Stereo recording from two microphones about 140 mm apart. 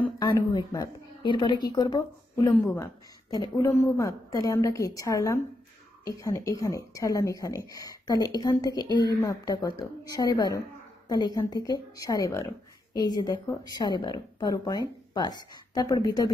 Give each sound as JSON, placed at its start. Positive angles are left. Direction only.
{"t": 0.5, "sound": "a woman's voice", "side_deg": 25}
{"t": 2.5, "sound": "a woman's voice", "side_deg": 15}
{"t": 3.3, "sound": "a woman's voice", "side_deg": 25}